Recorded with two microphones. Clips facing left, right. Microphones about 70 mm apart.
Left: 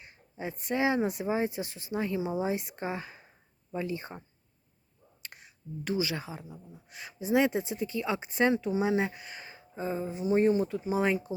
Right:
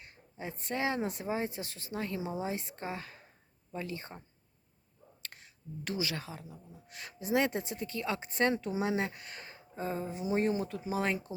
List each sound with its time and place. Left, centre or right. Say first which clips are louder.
0.0 s speech: left 4 dB; centre
2.3 s speech: left 5 dB; left
5.2 s a sound: left 2 dB; centre
5.8 s speech: left 5 dB; centre